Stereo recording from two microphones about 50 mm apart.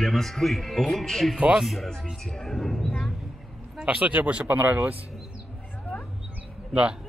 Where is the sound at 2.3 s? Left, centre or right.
Centre.